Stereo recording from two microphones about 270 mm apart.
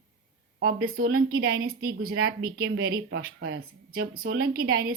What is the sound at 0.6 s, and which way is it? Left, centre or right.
A woman's voice, right.